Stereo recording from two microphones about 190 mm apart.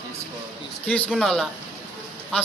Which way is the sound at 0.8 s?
5° left (ahead or behind).